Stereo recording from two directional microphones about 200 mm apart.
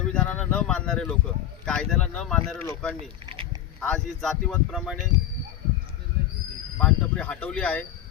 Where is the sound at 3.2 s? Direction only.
30° right (ahead or behind).